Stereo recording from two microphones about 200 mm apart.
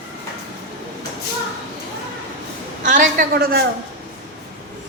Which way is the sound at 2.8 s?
40° right (ahead or behind).